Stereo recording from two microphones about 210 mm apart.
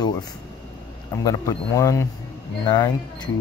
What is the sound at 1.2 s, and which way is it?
Speech, 15° left (ahead or behind).